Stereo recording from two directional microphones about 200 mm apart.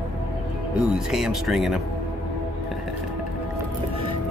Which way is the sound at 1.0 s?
Centre (ahead or behind).